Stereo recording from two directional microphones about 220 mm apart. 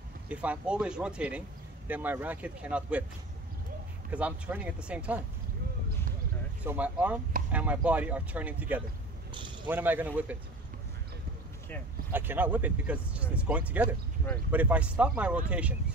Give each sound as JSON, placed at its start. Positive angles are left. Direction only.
{"t": 0.3, "sound": "speech", "side_deg": -5}
{"t": 4.1, "sound": "speech", "side_deg": -5}
{"t": 6.6, "sound": "speech", "side_deg": -5}
{"t": 12.1, "sound": "speech", "side_deg": -10}